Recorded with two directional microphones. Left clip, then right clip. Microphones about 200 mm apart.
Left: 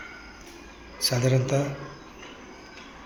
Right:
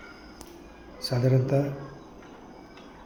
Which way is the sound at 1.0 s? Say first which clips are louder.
Left 2 dB; 10° right (ahead or behind).